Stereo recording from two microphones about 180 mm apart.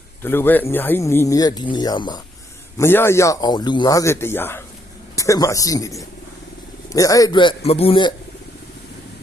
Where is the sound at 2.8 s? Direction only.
15° left (ahead or behind); by 8.1 s 30° left (ahead or behind).